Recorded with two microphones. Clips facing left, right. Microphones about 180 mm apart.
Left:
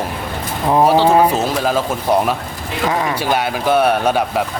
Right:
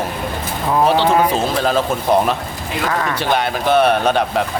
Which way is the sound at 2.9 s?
15° left (ahead or behind).